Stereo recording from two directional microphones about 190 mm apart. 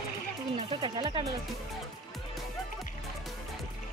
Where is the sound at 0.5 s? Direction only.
25° right (ahead or behind).